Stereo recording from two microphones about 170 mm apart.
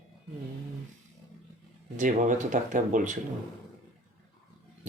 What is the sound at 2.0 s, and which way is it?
Speech, 50° right (ahead or behind).